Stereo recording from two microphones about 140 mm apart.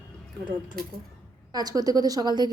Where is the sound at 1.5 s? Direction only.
30° right (ahead or behind).